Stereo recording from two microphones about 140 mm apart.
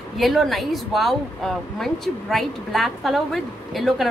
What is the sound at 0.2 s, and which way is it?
A woman's voice, centre (ahead or behind).